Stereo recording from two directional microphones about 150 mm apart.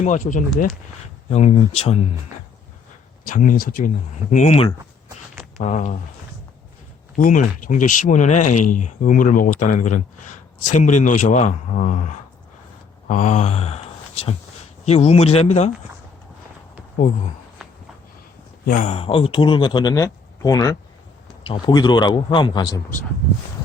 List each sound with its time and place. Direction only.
0.0 s speech: 55° left (ahead or behind)
1.3 s speech: 45° left (ahead or behind)
3.2 s speech: 65° left (ahead or behind)
7.2 s speech: 60° left (ahead or behind)
18.8 s a man's voice: 45° left (ahead or behind); by 22.8 s 30° left (ahead or behind)